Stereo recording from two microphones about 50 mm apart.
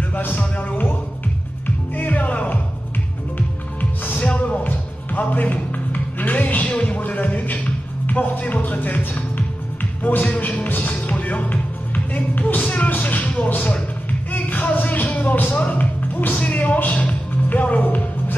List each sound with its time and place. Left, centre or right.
0.1 s music: left
2.0 s music: left
4.0 s music: left
13.5 s a sound: left
14.3 s music: left